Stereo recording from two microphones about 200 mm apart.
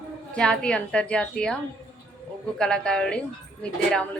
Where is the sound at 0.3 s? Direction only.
5° left (ahead or behind).